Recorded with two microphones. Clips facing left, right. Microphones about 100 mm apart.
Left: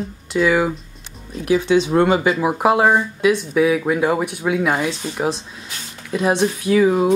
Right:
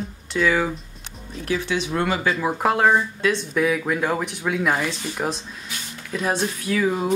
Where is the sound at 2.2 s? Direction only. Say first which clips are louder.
Left 5 dB; 10° left (ahead or behind).